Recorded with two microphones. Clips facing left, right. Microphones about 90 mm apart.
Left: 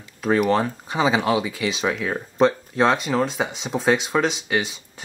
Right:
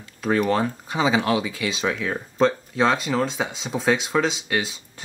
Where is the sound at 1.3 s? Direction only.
20° left (ahead or behind).